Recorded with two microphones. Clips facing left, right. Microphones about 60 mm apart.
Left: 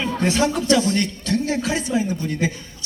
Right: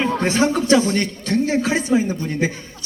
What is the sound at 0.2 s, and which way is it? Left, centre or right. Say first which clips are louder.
A man's voice: right 2 dB; right.